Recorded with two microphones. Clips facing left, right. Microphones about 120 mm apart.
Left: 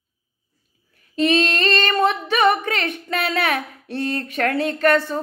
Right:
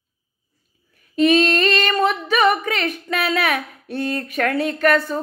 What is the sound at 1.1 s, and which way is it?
Singing, 30° left (ahead or behind).